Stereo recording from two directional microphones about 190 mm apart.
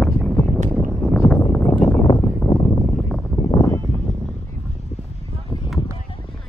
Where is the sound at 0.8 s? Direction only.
5° right (ahead or behind).